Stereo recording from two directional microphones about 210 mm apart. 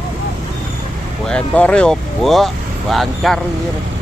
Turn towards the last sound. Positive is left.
turn(degrees=0)  # may be behind; listen again after turning